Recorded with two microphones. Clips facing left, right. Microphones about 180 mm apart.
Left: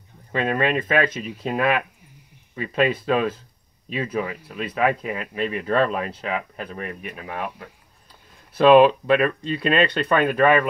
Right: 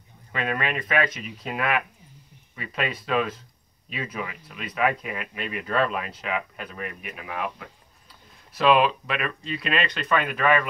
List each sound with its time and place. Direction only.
0.3 s speech: 30° left (ahead or behind)